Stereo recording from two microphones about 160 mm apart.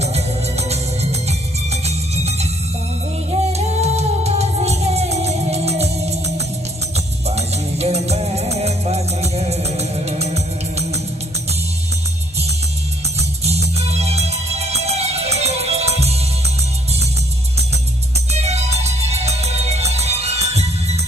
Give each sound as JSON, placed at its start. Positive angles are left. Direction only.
{"t": 1.9, "sound": "music", "side_deg": -40}
{"t": 13.4, "sound": "music", "side_deg": -40}
{"t": 18.3, "sound": "music", "side_deg": -40}